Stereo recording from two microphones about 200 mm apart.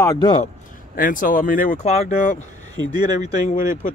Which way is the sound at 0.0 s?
20° left (ahead or behind).